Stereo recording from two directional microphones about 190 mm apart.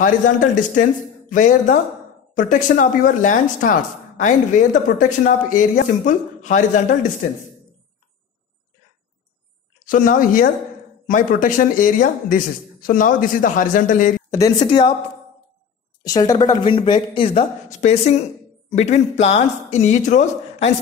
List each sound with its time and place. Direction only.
0.0 s speech: 45° left (ahead or behind)
9.8 s speech: 45° left (ahead or behind)
14.3 s a woman's voice: 20° left (ahead or behind)
16.0 s speech: 20° left (ahead or behind); by 20.7 s 35° left (ahead or behind)